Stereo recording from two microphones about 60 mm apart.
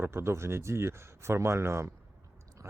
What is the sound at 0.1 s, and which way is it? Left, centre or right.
Speech, right.